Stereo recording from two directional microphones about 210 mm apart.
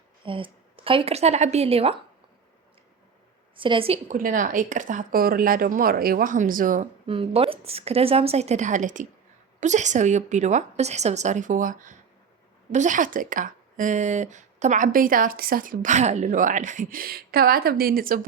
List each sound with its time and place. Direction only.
0.3 s a woman's voice: 25° right (ahead or behind)
3.5 s a woman's voice: 25° right (ahead or behind)
4.2 s a woman's voice: 40° right (ahead or behind)
7.1 s a woman's voice: 25° right (ahead or behind); by 18.2 s 45° right (ahead or behind)